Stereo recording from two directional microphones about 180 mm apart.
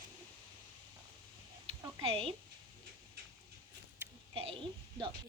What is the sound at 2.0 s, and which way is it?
Speech, 30° right (ahead or behind).